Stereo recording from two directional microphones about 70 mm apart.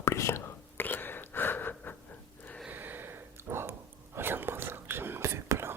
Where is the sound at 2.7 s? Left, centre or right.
Right.